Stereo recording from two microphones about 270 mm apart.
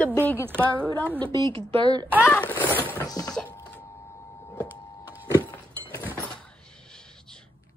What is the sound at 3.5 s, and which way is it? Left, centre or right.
Printer, centre.